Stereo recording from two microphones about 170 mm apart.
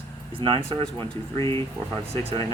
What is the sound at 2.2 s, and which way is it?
Speech, 35° right (ahead or behind).